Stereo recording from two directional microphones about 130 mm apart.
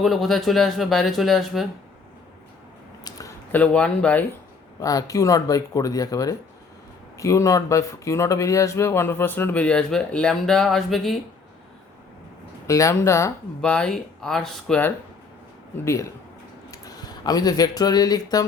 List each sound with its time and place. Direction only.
0.0 s speech: centre (ahead or behind)
3.0 s a sound: 25° left (ahead or behind)
3.5 s speech: 10° left (ahead or behind)
4.8 s speech: 25° left (ahead or behind); by 11.2 s centre (ahead or behind)
12.6 s speech: 25° left (ahead or behind)
13.6 s speech: 10° left (ahead or behind)
15.8 s speech: 20° left (ahead or behind)